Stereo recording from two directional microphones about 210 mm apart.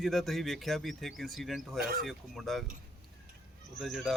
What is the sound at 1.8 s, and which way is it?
Speech, 45° right (ahead or behind).